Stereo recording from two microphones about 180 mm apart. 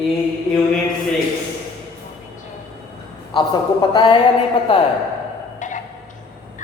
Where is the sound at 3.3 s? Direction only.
25° left (ahead or behind).